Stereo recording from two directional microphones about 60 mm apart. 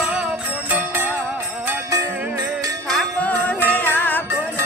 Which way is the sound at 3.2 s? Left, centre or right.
Left.